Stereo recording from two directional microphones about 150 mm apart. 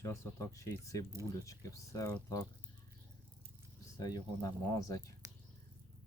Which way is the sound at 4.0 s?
25° left (ahead or behind).